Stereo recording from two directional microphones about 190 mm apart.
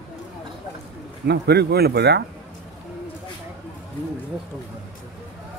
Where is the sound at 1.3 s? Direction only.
60° right (ahead or behind).